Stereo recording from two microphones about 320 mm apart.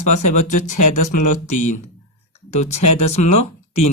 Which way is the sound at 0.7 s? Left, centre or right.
Left.